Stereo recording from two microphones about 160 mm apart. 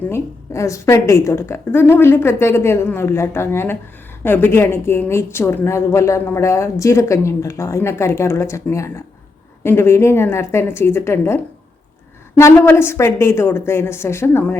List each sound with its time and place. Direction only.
0.1 s a woman's voice: 20° left (ahead or behind)
12.4 s a woman's voice: 15° left (ahead or behind)